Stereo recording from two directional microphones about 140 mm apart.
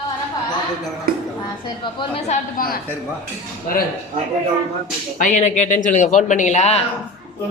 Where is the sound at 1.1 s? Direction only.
90° right.